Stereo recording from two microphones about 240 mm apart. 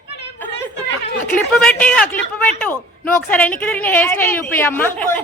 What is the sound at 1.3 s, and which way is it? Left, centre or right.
Speech, centre.